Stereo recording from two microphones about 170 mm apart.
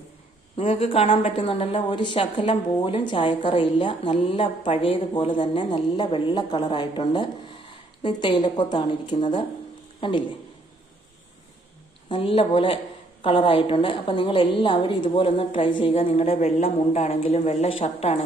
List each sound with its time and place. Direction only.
0.5 s a woman's voice: 35° left (ahead or behind)
12.0 s a woman's voice: 30° left (ahead or behind)